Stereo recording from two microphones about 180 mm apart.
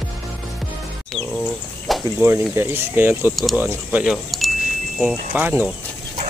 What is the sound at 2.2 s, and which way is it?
Speech, 15° right (ahead or behind).